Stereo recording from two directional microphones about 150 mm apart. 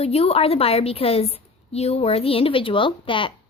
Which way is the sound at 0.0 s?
45° left (ahead or behind).